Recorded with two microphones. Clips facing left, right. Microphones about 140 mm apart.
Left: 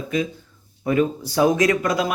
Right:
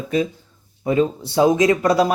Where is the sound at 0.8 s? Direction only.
25° right (ahead or behind).